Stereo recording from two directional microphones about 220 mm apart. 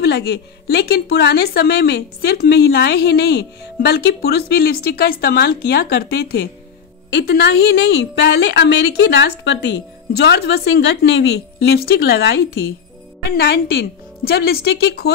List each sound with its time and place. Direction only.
0.0 s speech: 50° left (ahead or behind)